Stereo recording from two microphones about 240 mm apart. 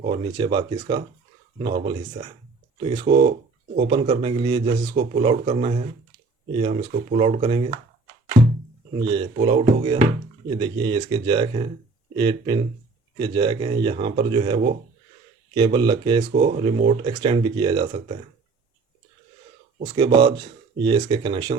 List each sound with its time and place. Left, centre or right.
0.3 s speech: centre
9.0 s speech: centre
19.8 s speech: centre